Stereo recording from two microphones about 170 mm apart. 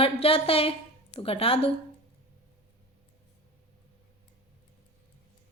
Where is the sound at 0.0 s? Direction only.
35° left (ahead or behind).